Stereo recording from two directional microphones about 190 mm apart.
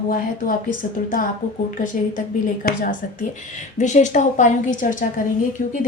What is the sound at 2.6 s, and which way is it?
Speech, 45° left (ahead or behind).